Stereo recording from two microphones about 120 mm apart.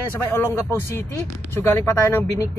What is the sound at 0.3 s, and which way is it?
Speech, 20° left (ahead or behind).